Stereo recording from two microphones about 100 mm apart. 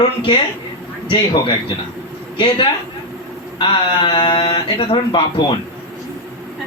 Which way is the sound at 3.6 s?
50° left (ahead or behind).